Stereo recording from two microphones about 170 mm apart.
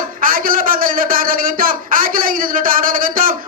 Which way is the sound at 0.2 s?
55° right (ahead or behind).